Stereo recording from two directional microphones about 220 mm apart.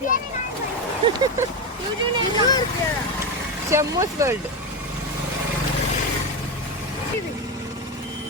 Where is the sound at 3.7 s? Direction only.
15° right (ahead or behind).